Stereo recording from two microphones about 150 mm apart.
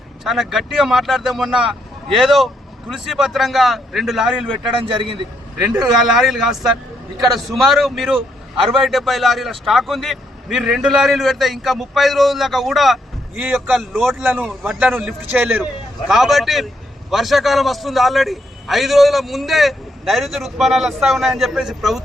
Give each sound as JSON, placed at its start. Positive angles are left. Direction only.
{"t": 0.3, "sound": "a man's voice", "side_deg": 0}
{"t": 4.8, "sound": "a man's voice", "side_deg": -35}
{"t": 5.6, "sound": "a man's voice", "side_deg": -5}